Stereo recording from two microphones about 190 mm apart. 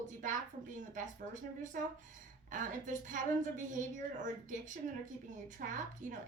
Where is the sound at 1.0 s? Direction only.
45° right (ahead or behind).